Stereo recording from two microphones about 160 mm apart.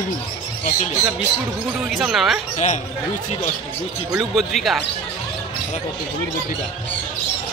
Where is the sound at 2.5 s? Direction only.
45° left (ahead or behind).